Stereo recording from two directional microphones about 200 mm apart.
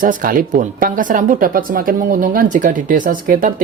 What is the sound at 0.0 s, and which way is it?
Speech, 45° right (ahead or behind).